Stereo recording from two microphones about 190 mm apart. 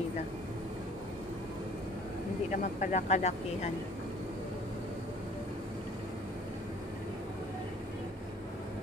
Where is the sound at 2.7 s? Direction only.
40° left (ahead or behind).